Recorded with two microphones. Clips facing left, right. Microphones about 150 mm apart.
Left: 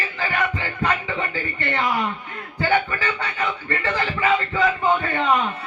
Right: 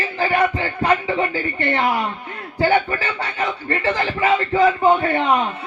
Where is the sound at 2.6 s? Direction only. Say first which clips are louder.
Right 3 dB; 35° right (ahead or behind).